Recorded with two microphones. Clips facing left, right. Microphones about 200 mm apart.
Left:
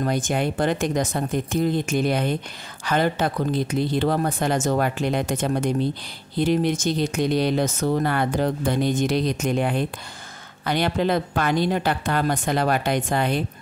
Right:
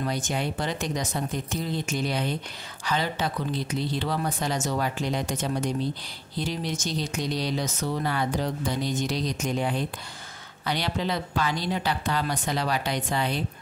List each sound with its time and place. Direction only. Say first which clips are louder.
0.0 s speech: left 6 dB; 50° left (ahead or behind)